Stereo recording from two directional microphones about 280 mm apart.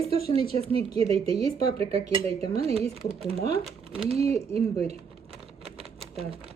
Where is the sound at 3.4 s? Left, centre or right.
Left.